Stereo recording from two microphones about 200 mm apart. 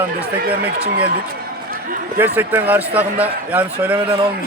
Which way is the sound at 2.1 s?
10° right (ahead or behind).